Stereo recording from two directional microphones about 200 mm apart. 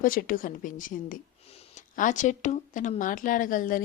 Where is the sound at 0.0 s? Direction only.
45° left (ahead or behind).